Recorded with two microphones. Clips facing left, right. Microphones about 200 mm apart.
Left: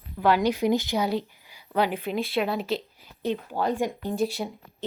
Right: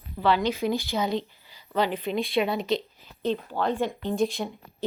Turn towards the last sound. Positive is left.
turn(degrees=10)  # may be behind; listen again after turning